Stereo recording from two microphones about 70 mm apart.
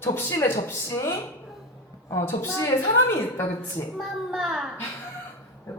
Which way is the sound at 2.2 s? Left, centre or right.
Left.